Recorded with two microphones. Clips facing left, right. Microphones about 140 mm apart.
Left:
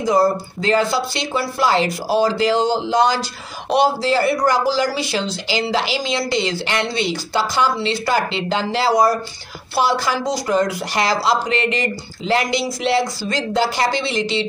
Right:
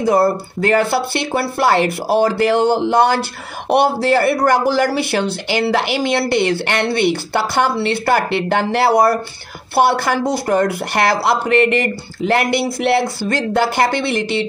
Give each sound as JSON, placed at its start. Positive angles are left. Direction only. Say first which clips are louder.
{"t": 0.0, "sound": "speech", "louder": "right 2 dB", "side_deg": -60}